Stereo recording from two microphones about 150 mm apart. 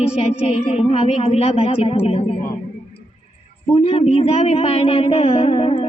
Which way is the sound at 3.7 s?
40° left (ahead or behind).